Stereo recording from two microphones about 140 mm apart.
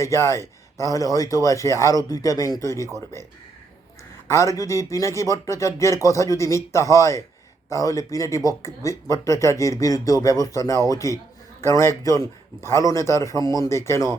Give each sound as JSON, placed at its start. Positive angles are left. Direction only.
{"t": 0.0, "sound": "speech", "side_deg": 20}
{"t": 4.3, "sound": "speech", "side_deg": 20}